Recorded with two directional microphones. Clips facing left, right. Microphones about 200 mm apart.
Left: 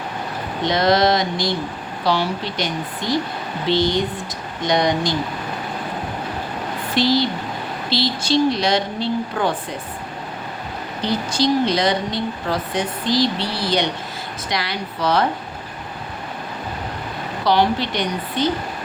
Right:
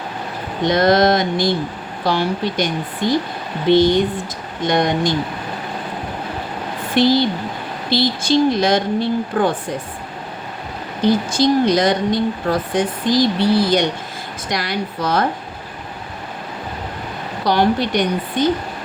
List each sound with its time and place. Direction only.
0.7 s a woman's voice: 50° right (ahead or behind)
6.9 s a woman's voice: 55° right (ahead or behind)
11.0 s a woman's voice: 50° right (ahead or behind)
17.4 s a woman's voice: 50° right (ahead or behind)